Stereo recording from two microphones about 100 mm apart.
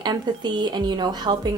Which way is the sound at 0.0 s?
45° right (ahead or behind).